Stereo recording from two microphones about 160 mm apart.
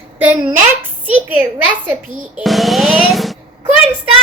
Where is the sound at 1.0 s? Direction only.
10° right (ahead or behind).